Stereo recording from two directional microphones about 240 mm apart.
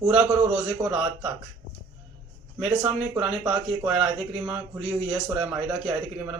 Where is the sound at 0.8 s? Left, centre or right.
Right.